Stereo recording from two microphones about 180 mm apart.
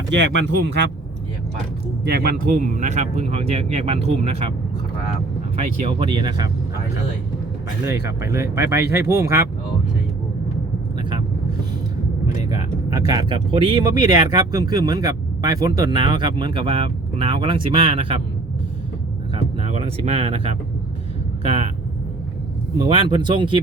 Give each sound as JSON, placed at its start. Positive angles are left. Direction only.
{"t": 0.1, "sound": "speech", "side_deg": -85}
{"t": 2.0, "sound": "speech", "side_deg": -60}
{"t": 5.5, "sound": "speech", "side_deg": -40}
{"t": 6.1, "sound": "speech", "side_deg": -25}
{"t": 8.2, "sound": "speech", "side_deg": -15}
{"t": 12.5, "sound": "speech", "side_deg": -20}
{"t": 19.4, "sound": "speech", "side_deg": -35}
{"t": 22.9, "sound": "speech", "side_deg": -30}